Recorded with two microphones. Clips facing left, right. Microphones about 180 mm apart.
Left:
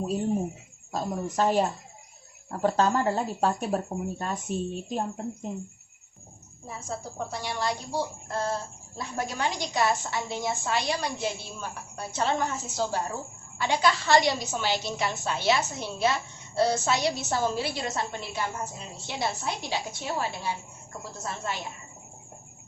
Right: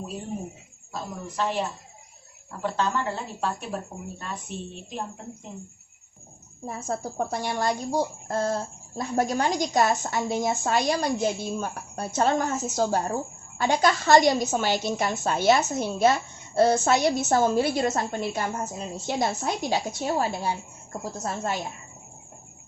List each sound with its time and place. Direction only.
1.4 s speech: 40° left (ahead or behind)
6.7 s a woman's voice: 50° right (ahead or behind)